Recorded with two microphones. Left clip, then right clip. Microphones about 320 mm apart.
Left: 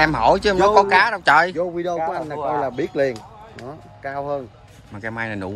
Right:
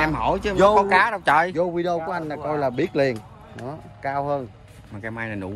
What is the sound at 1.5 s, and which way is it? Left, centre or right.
A man's voice, right.